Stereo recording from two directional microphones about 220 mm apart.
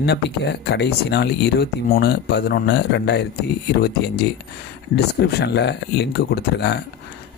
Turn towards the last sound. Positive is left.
turn(degrees=50)  # may be behind; listen again after turning